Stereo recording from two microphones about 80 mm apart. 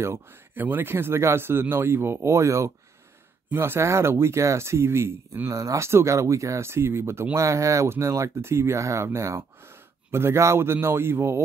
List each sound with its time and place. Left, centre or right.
0.0 s speech: right